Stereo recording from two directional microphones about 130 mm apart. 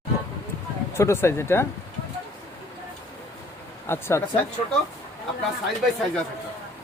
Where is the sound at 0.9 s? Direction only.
20° left (ahead or behind).